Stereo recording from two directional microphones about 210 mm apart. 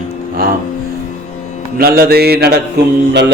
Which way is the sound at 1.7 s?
45° right (ahead or behind).